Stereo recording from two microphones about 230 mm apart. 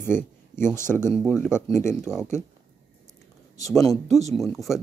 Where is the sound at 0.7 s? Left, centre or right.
Centre.